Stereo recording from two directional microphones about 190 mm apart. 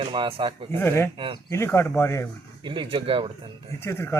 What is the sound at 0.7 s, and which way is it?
Speech, 10° left (ahead or behind).